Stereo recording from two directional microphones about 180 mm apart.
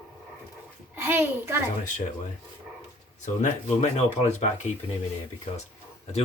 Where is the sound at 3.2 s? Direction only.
40° left (ahead or behind).